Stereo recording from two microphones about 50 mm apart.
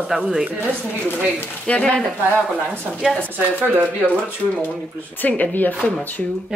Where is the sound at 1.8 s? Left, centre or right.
Centre.